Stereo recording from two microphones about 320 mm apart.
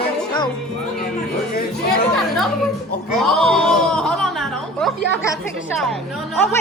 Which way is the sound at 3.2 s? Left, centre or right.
Centre.